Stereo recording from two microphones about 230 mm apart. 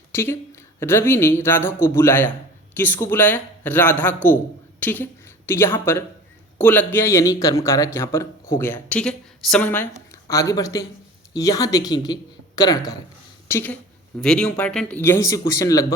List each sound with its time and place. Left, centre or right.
0.1 s a woman's voice: centre